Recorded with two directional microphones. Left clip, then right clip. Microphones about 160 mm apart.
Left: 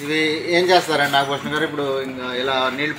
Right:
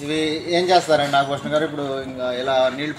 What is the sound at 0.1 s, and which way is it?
Speech, 90° right.